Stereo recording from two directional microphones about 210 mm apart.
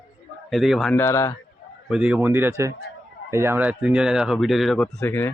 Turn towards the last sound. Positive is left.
turn(degrees=10)  # may be behind; listen again after turning